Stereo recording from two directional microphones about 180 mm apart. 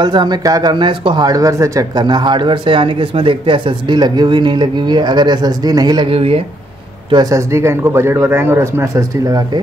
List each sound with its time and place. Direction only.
0.0 s speech: 25° right (ahead or behind)
7.1 s a man's voice: 20° right (ahead or behind)